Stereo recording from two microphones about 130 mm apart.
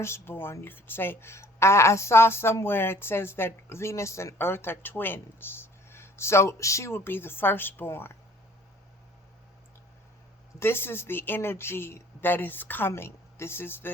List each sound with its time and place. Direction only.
0.0 s a woman's voice: 20° left (ahead or behind)
10.6 s a woman's voice: 15° left (ahead or behind)